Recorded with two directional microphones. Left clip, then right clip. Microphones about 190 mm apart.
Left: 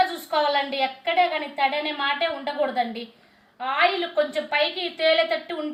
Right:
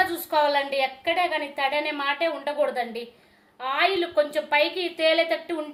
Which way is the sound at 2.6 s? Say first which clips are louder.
Left 3 dB; 60° right (ahead or behind).